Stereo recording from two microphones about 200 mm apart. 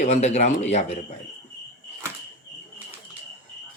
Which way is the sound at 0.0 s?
35° left (ahead or behind).